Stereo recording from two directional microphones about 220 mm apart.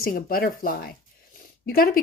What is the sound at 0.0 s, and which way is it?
A woman's voice, 40° left (ahead or behind).